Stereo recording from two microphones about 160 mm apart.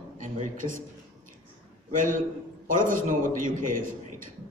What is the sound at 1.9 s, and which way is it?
A man's voice, 55° right (ahead or behind).